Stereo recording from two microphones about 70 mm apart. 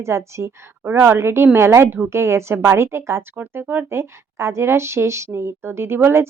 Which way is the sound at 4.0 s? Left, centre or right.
Right.